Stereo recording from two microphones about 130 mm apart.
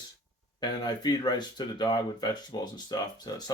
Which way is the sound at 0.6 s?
35° left (ahead or behind).